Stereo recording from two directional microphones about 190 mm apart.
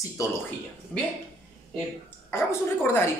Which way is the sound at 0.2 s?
15° left (ahead or behind).